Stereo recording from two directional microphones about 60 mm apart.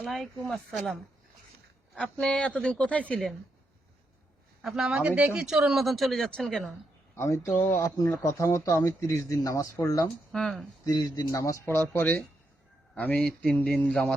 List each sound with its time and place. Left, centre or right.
0.0 s speech: centre
2.0 s speech: centre
4.6 s speech: centre
4.9 s speech: centre
7.4 s speech: left
8.5 s speech: left
10.3 s speech: centre
10.8 s speech: left
13.2 s speech: centre